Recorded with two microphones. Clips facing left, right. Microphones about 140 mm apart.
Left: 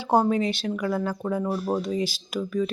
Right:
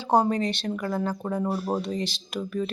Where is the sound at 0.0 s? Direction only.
5° left (ahead or behind).